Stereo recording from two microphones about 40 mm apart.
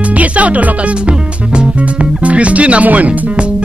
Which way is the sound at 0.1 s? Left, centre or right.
Right.